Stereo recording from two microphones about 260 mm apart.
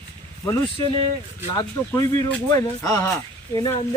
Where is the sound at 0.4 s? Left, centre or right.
Centre.